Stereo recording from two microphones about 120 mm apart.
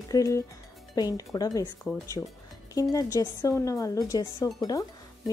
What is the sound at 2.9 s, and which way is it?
Speech, 30° left (ahead or behind).